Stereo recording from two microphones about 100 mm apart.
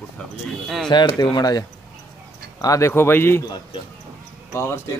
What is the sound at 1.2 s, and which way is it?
A man's voice, 40° left (ahead or behind).